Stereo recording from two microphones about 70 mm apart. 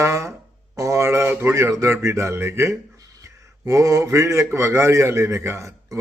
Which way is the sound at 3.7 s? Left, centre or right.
Right.